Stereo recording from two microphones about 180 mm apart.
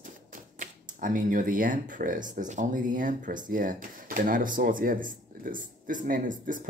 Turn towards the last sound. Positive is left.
turn(degrees=-45)  # may be behind; listen again after turning